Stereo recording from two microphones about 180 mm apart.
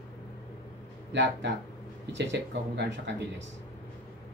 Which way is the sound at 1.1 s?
80° right.